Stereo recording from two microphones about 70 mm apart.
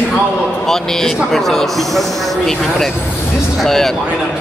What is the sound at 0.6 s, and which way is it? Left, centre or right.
A man's voice, centre.